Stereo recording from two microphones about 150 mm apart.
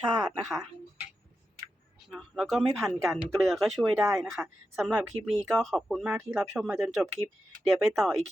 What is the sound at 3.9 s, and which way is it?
Speech, 20° right (ahead or behind).